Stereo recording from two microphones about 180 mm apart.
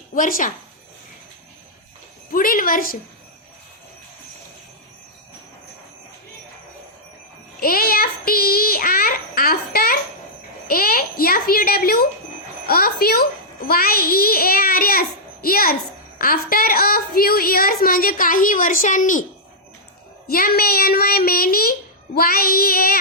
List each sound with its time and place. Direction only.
0.1 s speech: 50° left (ahead or behind)
2.3 s a woman's voice: 50° left (ahead or behind)
7.6 s a sound: 55° left (ahead or behind)
10.7 s a child's voice: 55° left (ahead or behind)
20.2 s a child's voice: 55° left (ahead or behind)